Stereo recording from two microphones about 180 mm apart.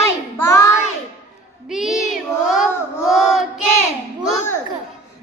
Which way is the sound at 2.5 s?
Centre (ahead or behind).